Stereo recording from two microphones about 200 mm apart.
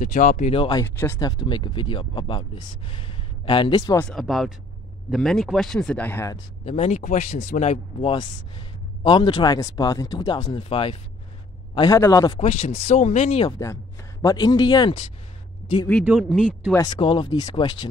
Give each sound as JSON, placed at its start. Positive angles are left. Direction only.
{"t": 0.0, "sound": "speech", "side_deg": 40}
{"t": 0.8, "sound": "speech", "side_deg": 10}
{"t": 1.3, "sound": "speech", "side_deg": 25}
{"t": 4.0, "sound": "speech", "side_deg": 0}
{"t": 6.6, "sound": "speech", "side_deg": 30}
{"t": 12.4, "sound": "speech", "side_deg": 30}
{"t": 13.5, "sound": "speech", "side_deg": 15}
{"t": 16.1, "sound": "speech", "side_deg": 0}
{"t": 16.7, "sound": "speech", "side_deg": 20}